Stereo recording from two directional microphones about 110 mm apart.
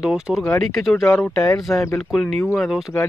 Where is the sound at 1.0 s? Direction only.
20° left (ahead or behind).